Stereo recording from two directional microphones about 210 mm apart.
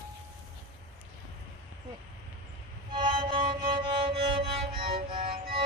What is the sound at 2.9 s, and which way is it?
Music, 25° right (ahead or behind).